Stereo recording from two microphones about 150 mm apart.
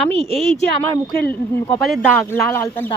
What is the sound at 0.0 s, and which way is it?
Speech, centre (ahead or behind).